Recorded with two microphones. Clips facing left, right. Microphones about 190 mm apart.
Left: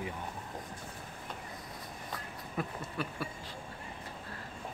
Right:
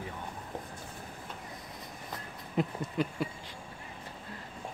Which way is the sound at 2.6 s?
20° right (ahead or behind).